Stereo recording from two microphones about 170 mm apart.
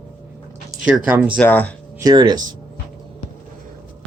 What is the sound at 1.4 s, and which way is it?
Speech, 10° left (ahead or behind).